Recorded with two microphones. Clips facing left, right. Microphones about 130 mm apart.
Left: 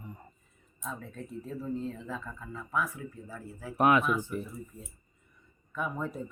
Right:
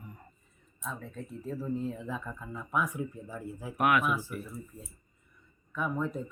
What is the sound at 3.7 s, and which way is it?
Speech, 25° left (ahead or behind).